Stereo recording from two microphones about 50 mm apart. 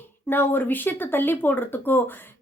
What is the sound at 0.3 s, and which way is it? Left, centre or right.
A woman's voice, left.